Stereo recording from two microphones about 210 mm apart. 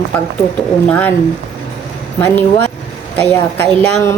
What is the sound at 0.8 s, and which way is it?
Speech, 5° left (ahead or behind).